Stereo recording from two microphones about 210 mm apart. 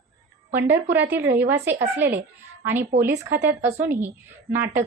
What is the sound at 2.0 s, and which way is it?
Speech, 10° right (ahead or behind).